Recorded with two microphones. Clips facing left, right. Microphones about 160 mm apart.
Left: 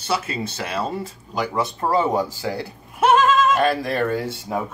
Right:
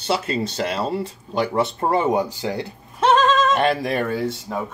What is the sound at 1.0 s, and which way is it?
Speech, 30° right (ahead or behind).